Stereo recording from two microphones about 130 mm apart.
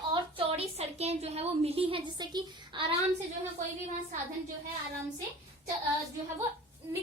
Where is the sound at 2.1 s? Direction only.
35° right (ahead or behind).